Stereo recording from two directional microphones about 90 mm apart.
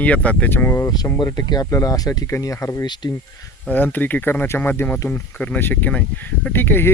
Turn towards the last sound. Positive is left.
turn(degrees=25)  # may be behind; listen again after turning